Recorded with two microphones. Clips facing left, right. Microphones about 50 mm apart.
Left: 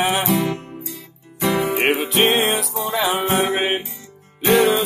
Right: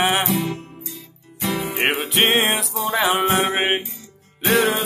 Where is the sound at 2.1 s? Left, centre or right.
Right.